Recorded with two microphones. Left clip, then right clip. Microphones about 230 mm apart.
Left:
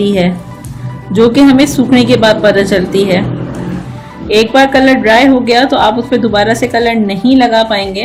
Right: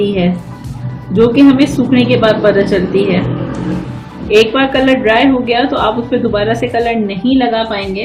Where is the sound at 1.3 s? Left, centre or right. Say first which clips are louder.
Left 2 dB; left.